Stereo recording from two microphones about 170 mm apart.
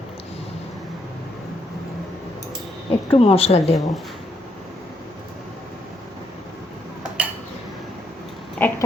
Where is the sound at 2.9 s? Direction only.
35° left (ahead or behind).